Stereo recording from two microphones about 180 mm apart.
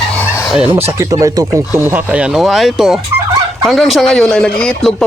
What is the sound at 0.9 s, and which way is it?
Speech, 15° right (ahead or behind).